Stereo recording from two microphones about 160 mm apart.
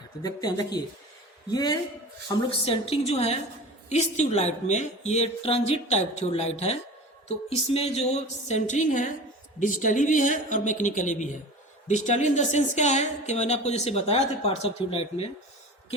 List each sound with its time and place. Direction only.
0.2 s speech: 25° left (ahead or behind)